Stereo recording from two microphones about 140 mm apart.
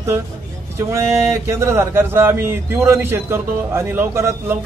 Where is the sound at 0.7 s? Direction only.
20° right (ahead or behind).